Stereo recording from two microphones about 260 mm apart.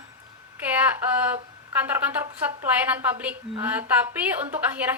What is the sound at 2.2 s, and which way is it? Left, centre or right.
A woman's voice, centre.